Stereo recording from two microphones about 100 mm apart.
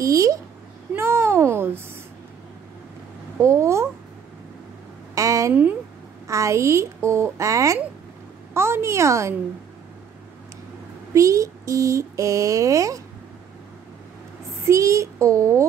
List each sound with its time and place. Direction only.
0.0 s speech: 35° right (ahead or behind)
0.9 s a sound: 25° right (ahead or behind)
3.3 s speech: 30° right (ahead or behind)
5.1 s a sound: 35° right (ahead or behind)
5.5 s speech: 15° right (ahead or behind)
6.2 s speech: 30° right (ahead or behind)
11.1 s speech: 30° right (ahead or behind)
14.6 s speech: 30° right (ahead or behind)